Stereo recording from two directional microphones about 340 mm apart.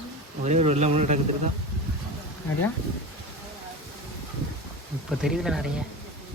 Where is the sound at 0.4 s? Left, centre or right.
Centre.